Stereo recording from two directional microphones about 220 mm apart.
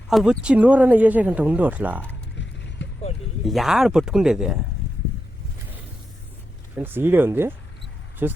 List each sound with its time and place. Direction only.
0.1 s speech: centre (ahead or behind)
2.8 s vehicle: 55° left (ahead or behind)
3.4 s speech: centre (ahead or behind)
6.7 s speech: 10° right (ahead or behind)